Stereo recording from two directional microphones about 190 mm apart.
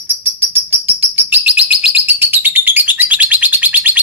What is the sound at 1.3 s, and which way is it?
Bird, 5° right (ahead or behind).